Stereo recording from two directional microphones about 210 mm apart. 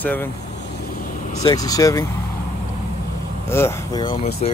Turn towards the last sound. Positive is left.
turn(degrees=35)  # may be behind; listen again after turning